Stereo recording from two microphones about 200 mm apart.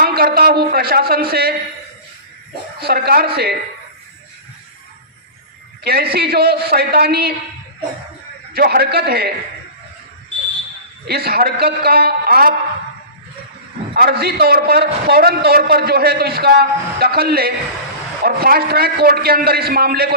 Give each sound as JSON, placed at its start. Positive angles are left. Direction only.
{"t": 0.0, "sound": "a sound", "side_deg": -50}
{"t": 2.8, "sound": "a man's voice", "side_deg": -50}
{"t": 5.8, "sound": "a man's voice", "side_deg": -50}
{"t": 8.5, "sound": "a man's voice", "side_deg": -50}
{"t": 11.0, "sound": "a man's voice", "side_deg": -50}
{"t": 13.9, "sound": "a man's voice", "side_deg": -50}